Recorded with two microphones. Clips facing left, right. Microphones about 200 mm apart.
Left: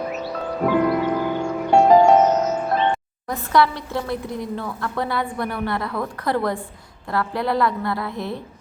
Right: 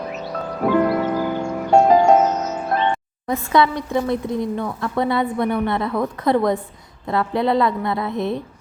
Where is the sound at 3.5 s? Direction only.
20° right (ahead or behind).